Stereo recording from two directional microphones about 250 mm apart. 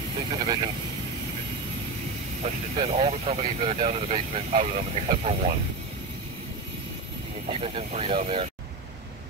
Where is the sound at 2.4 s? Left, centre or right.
Right.